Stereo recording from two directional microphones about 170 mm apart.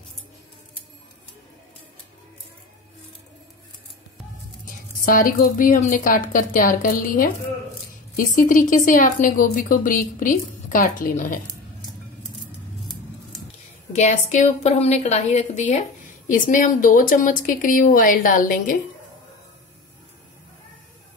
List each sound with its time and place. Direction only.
4.6 s a woman's voice: 55° left (ahead or behind)
13.9 s a woman's voice: 40° left (ahead or behind)